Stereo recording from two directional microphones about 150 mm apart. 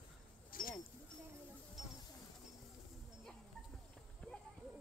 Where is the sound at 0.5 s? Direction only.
70° left (ahead or behind).